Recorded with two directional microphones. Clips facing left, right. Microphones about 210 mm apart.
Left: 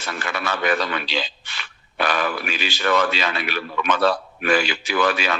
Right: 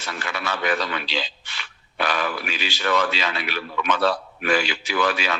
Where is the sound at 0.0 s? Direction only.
50° left (ahead or behind).